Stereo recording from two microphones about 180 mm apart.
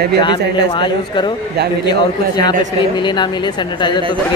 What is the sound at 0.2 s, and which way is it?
Speech, 25° left (ahead or behind).